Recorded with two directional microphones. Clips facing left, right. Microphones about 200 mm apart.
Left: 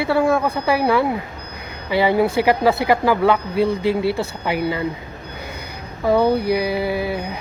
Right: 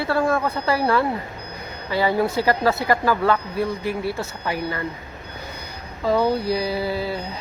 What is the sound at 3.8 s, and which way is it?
Speech, 85° left.